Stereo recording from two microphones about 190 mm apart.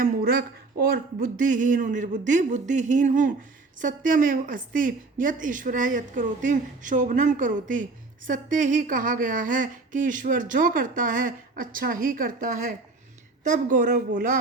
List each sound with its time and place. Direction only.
0.0 s speech: 50° right (ahead or behind)